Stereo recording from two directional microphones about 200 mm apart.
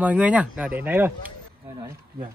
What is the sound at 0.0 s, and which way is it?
Speech, 5° right (ahead or behind).